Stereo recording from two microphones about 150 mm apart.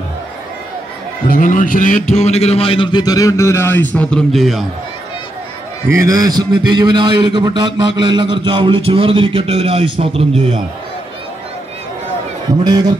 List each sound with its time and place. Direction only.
1.3 s a man's voice: 65° left (ahead or behind); by 4.6 s centre (ahead or behind)
5.9 s a man's voice: 20° right (ahead or behind); by 10.6 s 40° right (ahead or behind)
12.6 s a man's voice: 25° right (ahead or behind)